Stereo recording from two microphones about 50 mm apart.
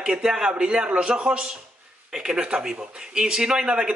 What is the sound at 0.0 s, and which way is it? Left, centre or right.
Speech, centre.